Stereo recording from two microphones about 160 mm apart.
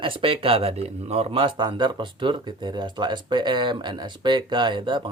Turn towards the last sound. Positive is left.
turn(degrees=-30)  # may be behind; listen again after turning